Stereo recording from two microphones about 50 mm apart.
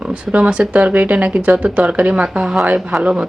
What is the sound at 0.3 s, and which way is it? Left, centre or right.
A woman's voice, right.